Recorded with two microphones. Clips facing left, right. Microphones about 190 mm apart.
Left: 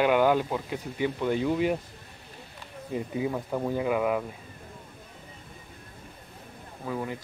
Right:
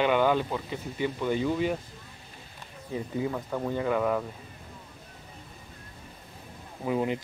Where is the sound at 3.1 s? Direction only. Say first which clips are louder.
Left 1 dB; 10° left (ahead or behind).